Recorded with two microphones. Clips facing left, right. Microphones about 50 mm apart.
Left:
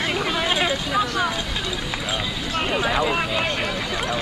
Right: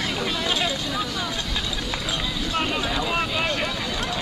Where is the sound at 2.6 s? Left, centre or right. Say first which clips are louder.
Left 8 dB; left.